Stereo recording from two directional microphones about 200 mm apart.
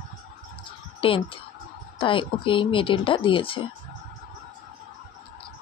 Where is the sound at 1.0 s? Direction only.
25° left (ahead or behind).